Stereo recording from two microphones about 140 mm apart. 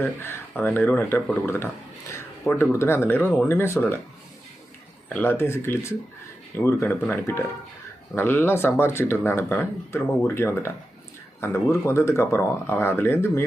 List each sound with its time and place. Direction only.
0.0 s speech: 15° left (ahead or behind)
5.0 s speech: 10° left (ahead or behind)